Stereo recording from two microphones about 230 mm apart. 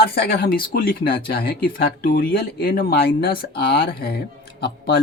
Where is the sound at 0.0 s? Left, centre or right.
Left.